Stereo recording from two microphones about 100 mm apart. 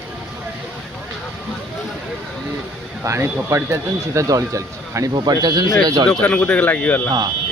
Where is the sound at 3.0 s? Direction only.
30° right (ahead or behind).